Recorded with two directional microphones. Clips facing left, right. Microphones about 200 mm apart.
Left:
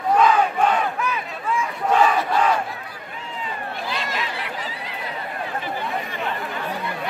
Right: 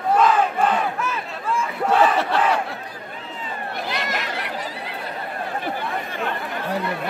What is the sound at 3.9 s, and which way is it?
Chatter, 70° right (ahead or behind).